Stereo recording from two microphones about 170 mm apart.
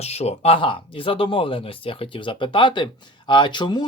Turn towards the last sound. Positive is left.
turn(degrees=25)  # may be behind; listen again after turning